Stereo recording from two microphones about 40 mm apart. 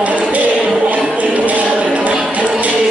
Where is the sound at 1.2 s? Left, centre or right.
Right.